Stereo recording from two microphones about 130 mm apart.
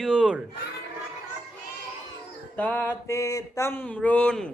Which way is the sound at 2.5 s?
10° left (ahead or behind).